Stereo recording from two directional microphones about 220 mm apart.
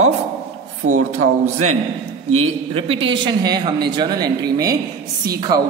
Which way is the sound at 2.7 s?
25° right (ahead or behind).